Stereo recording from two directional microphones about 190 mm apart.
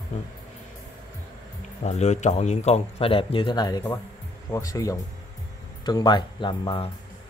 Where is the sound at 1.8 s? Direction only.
35° left (ahead or behind).